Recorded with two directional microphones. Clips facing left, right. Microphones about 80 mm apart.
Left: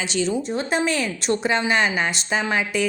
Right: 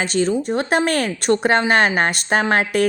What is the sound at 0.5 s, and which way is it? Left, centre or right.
A woman's voice, right.